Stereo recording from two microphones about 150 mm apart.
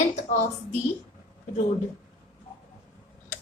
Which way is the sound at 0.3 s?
50° left (ahead or behind).